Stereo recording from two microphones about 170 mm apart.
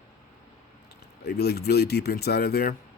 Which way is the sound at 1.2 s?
70° left (ahead or behind).